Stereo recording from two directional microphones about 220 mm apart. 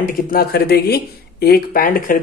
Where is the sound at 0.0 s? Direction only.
40° left (ahead or behind).